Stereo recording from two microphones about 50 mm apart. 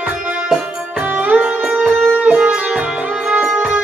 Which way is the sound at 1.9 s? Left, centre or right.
Right.